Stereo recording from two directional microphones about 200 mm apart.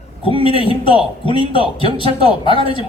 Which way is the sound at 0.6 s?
25° left (ahead or behind).